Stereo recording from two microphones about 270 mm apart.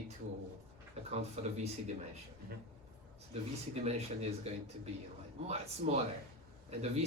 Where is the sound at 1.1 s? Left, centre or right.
Right.